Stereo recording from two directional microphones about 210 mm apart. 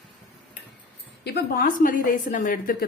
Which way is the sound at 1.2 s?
50° left (ahead or behind).